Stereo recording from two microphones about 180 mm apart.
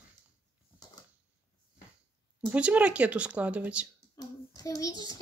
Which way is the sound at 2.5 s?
5° right (ahead or behind).